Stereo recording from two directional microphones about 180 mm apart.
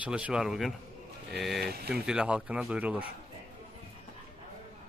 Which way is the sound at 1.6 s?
60° right (ahead or behind).